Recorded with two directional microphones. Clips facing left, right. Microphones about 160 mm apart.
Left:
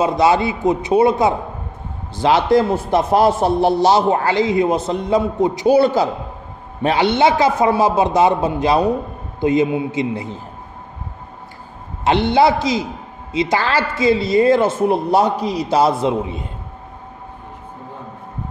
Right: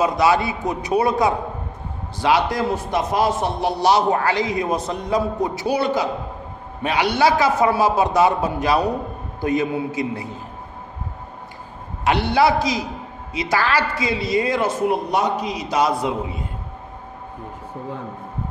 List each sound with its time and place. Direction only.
0.0 s a man's voice: 25° left (ahead or behind)
5.8 s a man's voice: 30° left (ahead or behind)
12.0 s a man's voice: 25° left (ahead or behind)